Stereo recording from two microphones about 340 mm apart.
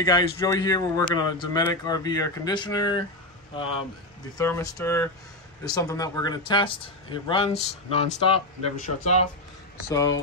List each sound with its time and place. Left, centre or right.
0.0 s a man's voice: centre
4.4 s a man's voice: centre